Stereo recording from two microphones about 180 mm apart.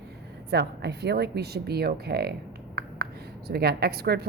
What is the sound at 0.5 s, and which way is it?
A woman's voice, 65° right (ahead or behind).